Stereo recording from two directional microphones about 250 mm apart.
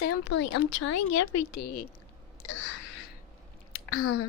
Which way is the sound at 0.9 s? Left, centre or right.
Left.